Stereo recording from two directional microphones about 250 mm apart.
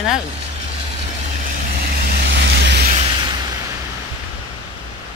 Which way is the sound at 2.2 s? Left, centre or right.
Right.